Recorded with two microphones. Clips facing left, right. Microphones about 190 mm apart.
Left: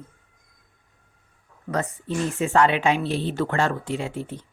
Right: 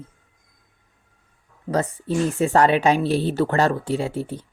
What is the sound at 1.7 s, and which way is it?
A woman's voice, 35° right (ahead or behind).